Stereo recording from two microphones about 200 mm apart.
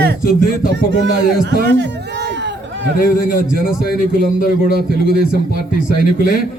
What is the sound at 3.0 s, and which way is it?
A man's voice, 45° left (ahead or behind).